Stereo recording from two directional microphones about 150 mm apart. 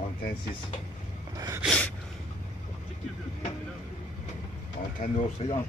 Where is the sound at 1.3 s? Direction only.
25° right (ahead or behind).